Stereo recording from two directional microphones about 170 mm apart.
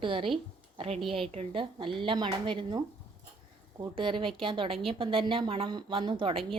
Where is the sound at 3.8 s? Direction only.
30° right (ahead or behind).